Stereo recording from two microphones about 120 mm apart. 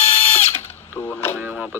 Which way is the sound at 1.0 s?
20° left (ahead or behind).